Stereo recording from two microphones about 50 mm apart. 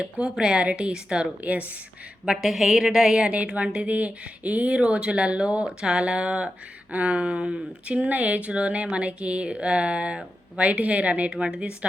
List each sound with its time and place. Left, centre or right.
0.0 s speech: right
2.2 s a woman's voice: centre
8.0 s speech: right